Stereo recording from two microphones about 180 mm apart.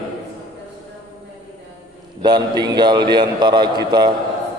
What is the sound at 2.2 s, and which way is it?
A man's voice, 25° right (ahead or behind).